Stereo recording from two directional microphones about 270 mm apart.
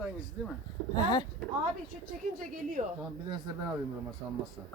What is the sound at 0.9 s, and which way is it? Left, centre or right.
Speech, centre.